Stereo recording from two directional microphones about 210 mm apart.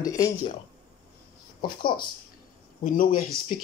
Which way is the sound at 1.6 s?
20° left (ahead or behind).